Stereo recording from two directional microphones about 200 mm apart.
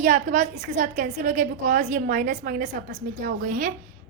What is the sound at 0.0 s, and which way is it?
A woman's voice, 40° right (ahead or behind).